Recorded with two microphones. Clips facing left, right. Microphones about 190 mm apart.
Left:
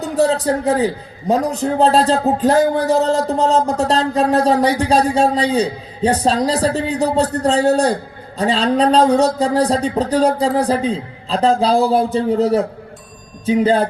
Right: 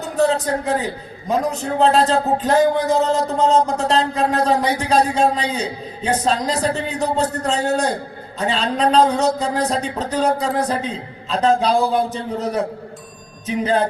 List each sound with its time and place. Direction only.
0.2 s a man's voice: 35° left (ahead or behind)